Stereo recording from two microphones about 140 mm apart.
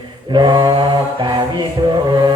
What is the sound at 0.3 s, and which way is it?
Mantra, 30° right (ahead or behind).